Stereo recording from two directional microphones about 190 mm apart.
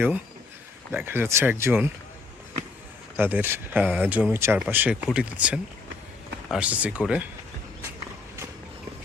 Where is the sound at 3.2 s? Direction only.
10° right (ahead or behind).